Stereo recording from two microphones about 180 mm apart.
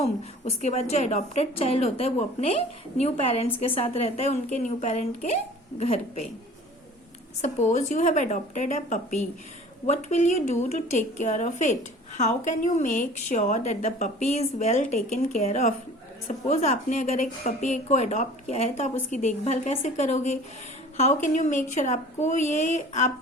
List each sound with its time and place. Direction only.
0.0 s a woman's voice: 35° left (ahead or behind)
7.4 s a woman's voice: 40° left (ahead or behind)